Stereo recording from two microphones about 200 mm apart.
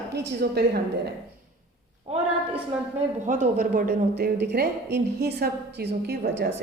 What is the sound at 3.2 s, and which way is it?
A woman's voice, 40° right (ahead or behind).